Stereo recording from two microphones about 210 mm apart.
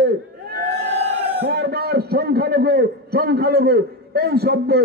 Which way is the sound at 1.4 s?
50° right (ahead or behind).